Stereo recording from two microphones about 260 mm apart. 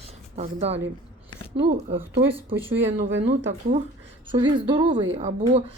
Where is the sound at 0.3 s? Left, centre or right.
Right.